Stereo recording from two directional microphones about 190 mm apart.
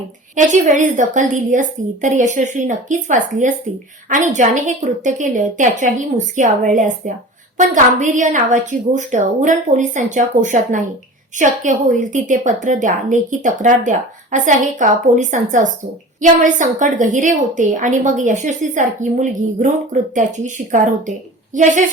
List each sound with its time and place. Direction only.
0.3 s a woman's voice: 40° right (ahead or behind)